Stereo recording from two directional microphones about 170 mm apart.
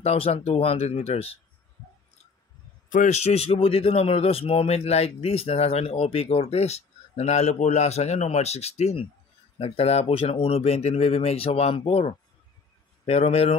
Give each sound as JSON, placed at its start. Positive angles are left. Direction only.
{"t": 0.0, "sound": "a man's voice", "side_deg": 35}
{"t": 2.9, "sound": "a man's voice", "side_deg": 45}